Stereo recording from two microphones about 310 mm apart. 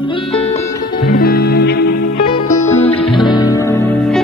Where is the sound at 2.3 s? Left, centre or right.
Centre.